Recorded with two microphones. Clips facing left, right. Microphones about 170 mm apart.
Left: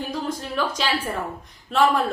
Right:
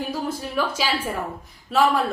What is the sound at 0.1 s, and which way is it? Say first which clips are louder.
A woman's voice: right 1 dB; 5° right (ahead or behind).